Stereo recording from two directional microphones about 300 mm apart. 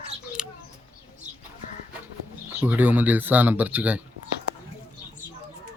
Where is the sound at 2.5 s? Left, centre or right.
Centre.